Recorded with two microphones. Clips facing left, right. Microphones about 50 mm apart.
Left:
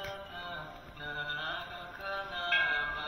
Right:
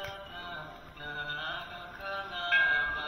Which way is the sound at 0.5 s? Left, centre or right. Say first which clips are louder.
Even; centre.